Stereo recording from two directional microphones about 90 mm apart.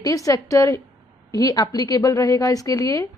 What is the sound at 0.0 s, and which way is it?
Speech, 40° left (ahead or behind).